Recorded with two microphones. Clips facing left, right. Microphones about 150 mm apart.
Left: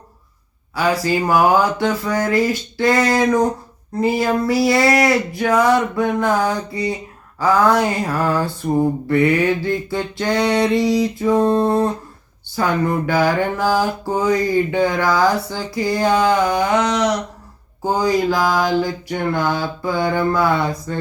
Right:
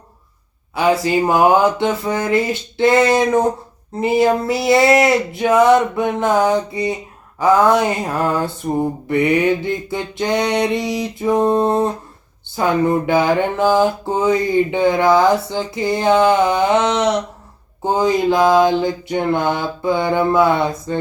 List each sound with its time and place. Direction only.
0.8 s mantra: 20° right (ahead or behind)